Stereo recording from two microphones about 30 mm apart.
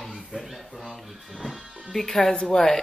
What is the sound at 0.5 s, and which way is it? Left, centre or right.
Speech, centre.